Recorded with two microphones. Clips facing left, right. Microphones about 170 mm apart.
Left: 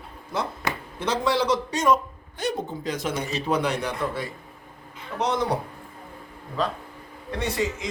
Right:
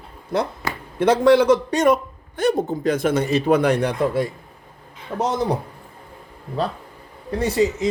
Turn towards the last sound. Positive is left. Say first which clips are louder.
# right 7 dB
turn(degrees=-35)  # may be behind; listen again after turning